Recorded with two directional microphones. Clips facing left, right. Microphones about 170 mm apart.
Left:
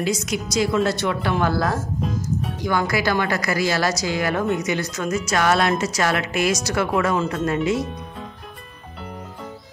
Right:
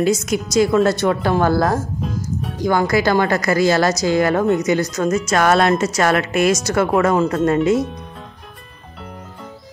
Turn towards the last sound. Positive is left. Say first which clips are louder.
# right 6 dB
turn(degrees=-45)  # may be behind; listen again after turning